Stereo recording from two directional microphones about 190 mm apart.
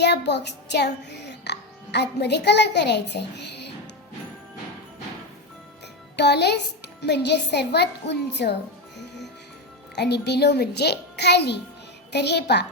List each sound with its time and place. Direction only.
0.0 s music: 65° left (ahead or behind)
6.1 s music: 60° left (ahead or behind)
9.9 s music: 60° left (ahead or behind)